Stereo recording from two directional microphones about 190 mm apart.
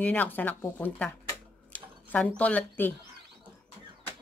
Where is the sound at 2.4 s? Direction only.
10° left (ahead or behind).